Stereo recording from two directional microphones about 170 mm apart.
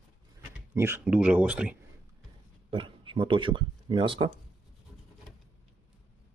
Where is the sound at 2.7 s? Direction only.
30° right (ahead or behind).